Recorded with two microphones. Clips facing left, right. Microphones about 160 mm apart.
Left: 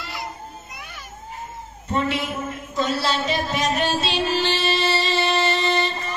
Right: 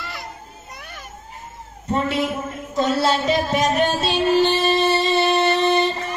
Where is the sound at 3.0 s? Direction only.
45° right (ahead or behind); by 5.7 s 60° right (ahead or behind).